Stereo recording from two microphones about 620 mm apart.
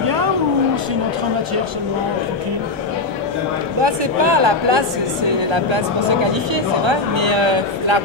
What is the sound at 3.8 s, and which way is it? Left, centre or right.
Speech, right.